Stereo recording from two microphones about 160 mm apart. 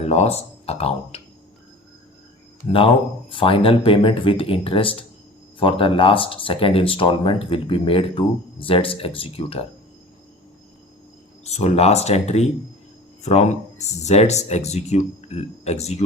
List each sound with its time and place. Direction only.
0.0 s speech: 40° left (ahead or behind)
2.7 s speech: 35° left (ahead or behind)
11.4 s speech: 40° left (ahead or behind)